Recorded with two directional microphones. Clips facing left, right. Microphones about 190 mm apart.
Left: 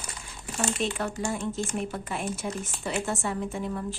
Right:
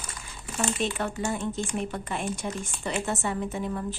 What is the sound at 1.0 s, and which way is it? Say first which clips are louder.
Speech: right 1 dB; centre (ahead or behind).